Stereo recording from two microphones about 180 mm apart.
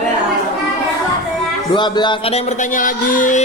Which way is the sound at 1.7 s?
25° left (ahead or behind).